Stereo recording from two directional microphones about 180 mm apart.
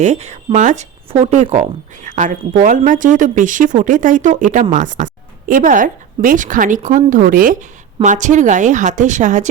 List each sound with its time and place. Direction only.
0.0 s speech: 40° right (ahead or behind)